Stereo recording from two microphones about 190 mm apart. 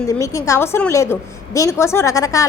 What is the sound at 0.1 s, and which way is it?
A woman's voice, 15° left (ahead or behind).